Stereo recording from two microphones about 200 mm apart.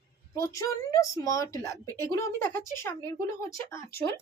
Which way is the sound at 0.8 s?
15° left (ahead or behind).